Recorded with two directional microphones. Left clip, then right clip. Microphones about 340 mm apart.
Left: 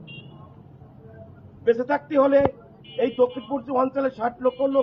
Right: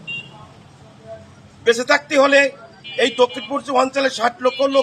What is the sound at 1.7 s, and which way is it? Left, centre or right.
A man's voice, right.